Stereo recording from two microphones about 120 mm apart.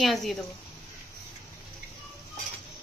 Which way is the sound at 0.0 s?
Centre (ahead or behind).